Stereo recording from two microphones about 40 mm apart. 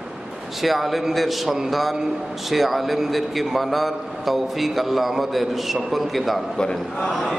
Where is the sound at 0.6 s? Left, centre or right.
Centre.